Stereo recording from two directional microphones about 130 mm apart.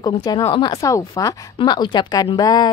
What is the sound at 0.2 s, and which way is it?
Speech, 30° left (ahead or behind).